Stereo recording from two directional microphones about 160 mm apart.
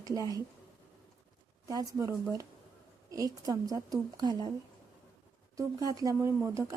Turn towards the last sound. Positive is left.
turn(degrees=-20)  # may be behind; listen again after turning